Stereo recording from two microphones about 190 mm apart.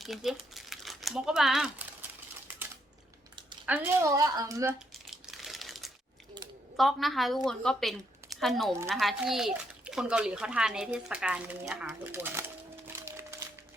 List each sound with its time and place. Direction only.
0.0 s speech: centre (ahead or behind)
3.7 s a woman's voice: 10° right (ahead or behind)
5.1 s typing: centre (ahead or behind)
6.7 s a woman's voice: centre (ahead or behind)
12.9 s music: 15° right (ahead or behind)